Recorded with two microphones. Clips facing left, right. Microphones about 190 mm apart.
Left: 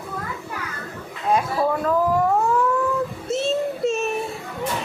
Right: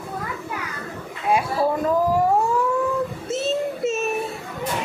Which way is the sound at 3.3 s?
Centre (ahead or behind).